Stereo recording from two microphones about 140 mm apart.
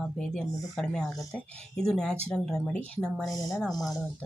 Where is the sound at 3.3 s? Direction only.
25° left (ahead or behind).